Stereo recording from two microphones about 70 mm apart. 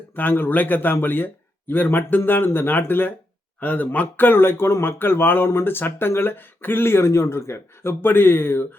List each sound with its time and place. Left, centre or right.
0.2 s speech: left